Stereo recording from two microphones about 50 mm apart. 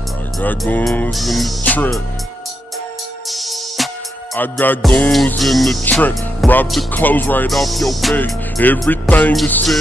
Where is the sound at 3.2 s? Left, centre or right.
Centre.